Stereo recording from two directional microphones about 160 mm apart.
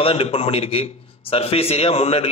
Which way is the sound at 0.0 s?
35° left (ahead or behind).